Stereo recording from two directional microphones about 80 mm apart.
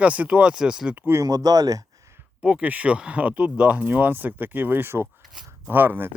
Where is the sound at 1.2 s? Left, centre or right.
Right.